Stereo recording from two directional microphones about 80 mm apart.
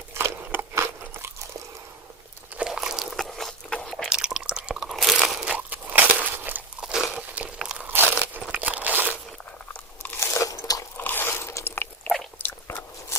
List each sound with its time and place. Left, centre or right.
0.1 s biting: right
2.6 s biting: centre
3.8 s crunch: centre
5.5 s crunch: right
6.8 s crunch: centre
8.4 s a sound: centre
9.7 s crunch: left
10.4 s biting: left
10.9 s biting: left
12.0 s biting: centre
12.4 s biting: left